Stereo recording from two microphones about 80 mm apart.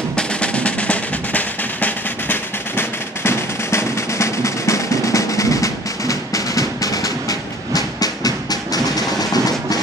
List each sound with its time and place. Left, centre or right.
0.1 s music: centre; by 9.8 s left